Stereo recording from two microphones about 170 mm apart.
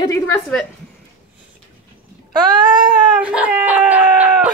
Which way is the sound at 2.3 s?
25° right (ahead or behind).